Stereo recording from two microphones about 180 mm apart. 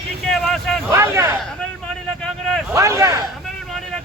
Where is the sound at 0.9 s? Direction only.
15° right (ahead or behind).